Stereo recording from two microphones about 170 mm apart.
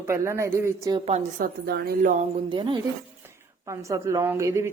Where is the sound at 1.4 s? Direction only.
60° right (ahead or behind).